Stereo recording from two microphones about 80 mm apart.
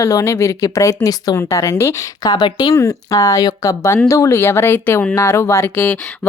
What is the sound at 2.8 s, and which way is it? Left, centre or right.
Speech, left.